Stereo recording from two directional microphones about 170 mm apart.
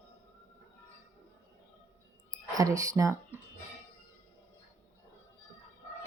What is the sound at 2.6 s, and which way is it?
Speech, 20° right (ahead or behind).